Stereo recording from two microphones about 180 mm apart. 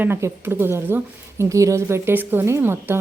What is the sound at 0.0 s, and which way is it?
A woman's voice, 15° right (ahead or behind).